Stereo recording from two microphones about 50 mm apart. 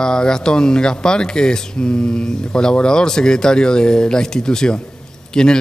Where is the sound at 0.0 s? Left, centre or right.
Centre.